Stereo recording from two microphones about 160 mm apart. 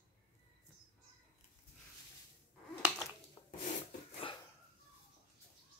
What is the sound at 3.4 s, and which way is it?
Rub, 30° left (ahead or behind).